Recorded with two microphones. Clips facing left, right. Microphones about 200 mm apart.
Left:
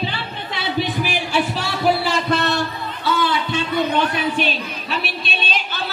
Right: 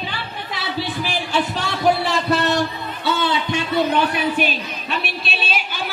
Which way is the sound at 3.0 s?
25° right (ahead or behind).